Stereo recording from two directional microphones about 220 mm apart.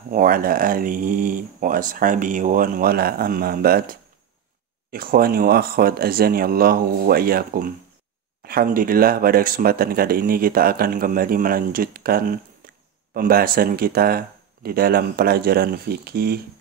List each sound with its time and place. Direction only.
0.1 s speech: 40° right (ahead or behind)